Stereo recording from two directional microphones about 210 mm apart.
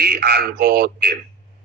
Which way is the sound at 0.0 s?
50° right (ahead or behind).